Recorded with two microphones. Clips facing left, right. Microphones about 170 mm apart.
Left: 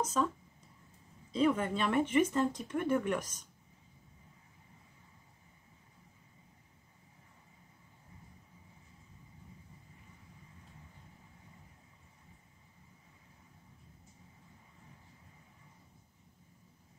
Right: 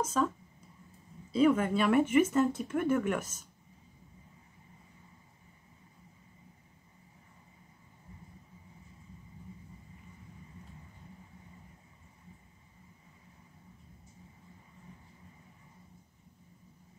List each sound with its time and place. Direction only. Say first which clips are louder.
0.0 s speech: right 2 dB; 5° right (ahead or behind)
1.3 s speech: right 4 dB; 5° right (ahead or behind)